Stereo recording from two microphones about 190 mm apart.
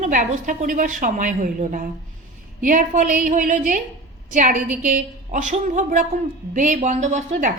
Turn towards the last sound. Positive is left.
turn(degrees=-40)  # may be behind; listen again after turning